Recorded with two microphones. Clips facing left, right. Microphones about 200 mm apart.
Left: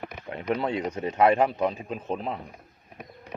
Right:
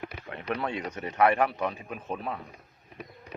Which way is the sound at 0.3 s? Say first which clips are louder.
Left 5 dB; 20° left (ahead or behind).